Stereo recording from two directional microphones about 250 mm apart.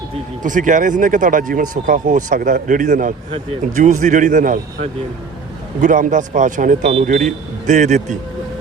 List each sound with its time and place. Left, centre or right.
0.4 s speech: right